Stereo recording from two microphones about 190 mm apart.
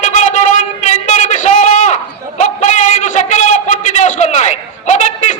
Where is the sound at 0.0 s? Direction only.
40° left (ahead or behind).